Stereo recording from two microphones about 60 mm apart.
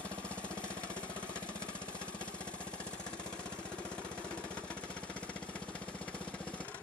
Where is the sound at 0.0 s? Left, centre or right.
Centre.